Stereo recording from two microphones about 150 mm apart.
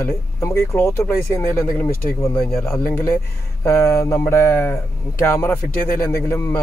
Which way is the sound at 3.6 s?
20° left (ahead or behind).